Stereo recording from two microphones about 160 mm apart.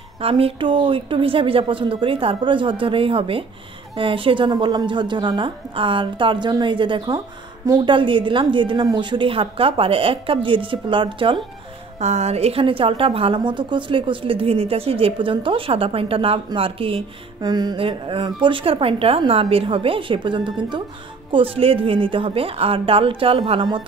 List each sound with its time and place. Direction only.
0.2 s a woman's voice: 35° right (ahead or behind)
12.0 s a woman's voice: 45° right (ahead or behind)